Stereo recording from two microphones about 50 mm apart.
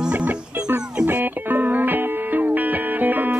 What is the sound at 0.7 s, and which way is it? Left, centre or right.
Music, right.